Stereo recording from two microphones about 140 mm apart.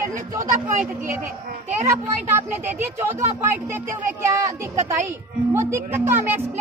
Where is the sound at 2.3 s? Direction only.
15° right (ahead or behind).